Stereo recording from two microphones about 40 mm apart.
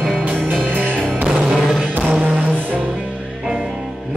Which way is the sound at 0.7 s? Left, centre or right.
Right.